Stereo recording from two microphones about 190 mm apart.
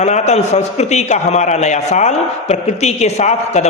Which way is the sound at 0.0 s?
35° left (ahead or behind).